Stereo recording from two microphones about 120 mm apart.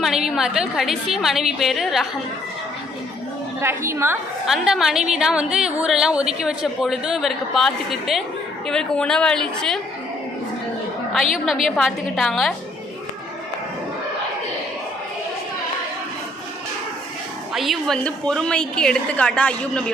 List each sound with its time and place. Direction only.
0.0 s a woman's voice: centre (ahead or behind)
3.6 s a woman's voice: 20° right (ahead or behind)
4.4 s a woman's voice: 5° right (ahead or behind)
11.1 s a woman's voice: centre (ahead or behind)
17.5 s a woman's voice: centre (ahead or behind)